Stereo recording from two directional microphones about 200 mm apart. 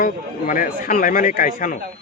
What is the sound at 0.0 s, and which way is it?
Speech, 40° left (ahead or behind).